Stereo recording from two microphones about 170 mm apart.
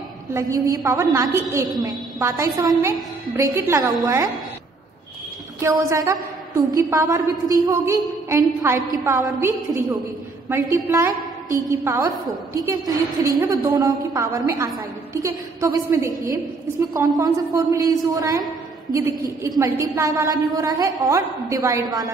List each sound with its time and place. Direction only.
0.3 s a woman's voice: 15° right (ahead or behind)
5.6 s a woman's voice: 15° right (ahead or behind)
10.5 s a woman's voice: 15° right (ahead or behind)